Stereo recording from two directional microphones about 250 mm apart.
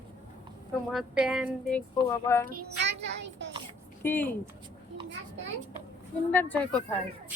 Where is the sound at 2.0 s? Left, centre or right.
Centre.